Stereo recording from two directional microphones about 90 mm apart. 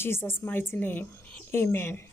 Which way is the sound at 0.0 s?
25° left (ahead or behind).